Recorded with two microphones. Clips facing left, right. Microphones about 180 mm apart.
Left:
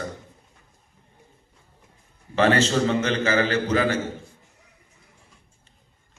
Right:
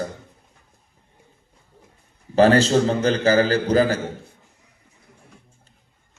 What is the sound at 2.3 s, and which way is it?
A man's voice, 35° right (ahead or behind).